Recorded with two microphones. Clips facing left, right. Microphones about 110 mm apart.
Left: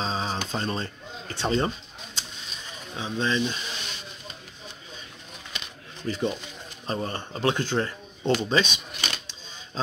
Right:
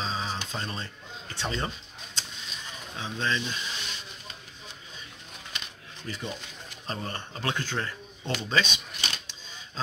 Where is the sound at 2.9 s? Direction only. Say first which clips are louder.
Left 4 dB; 20° left (ahead or behind).